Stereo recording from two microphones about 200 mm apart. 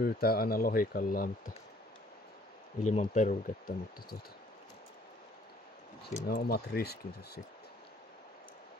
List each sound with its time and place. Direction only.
0.0 s speech: 50° left (ahead or behind)
2.8 s speech: 35° left (ahead or behind)
6.2 s speech: 50° left (ahead or behind)